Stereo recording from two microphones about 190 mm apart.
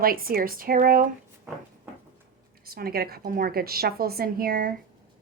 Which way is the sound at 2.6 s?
50° right (ahead or behind).